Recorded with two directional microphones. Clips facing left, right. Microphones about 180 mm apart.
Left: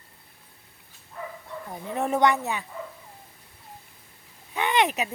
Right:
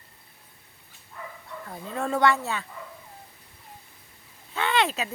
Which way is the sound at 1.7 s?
20° left (ahead or behind).